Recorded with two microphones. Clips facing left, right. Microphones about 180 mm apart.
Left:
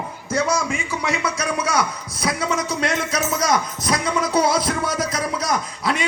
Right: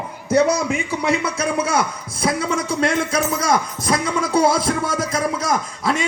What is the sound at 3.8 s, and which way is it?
Music, 25° right (ahead or behind).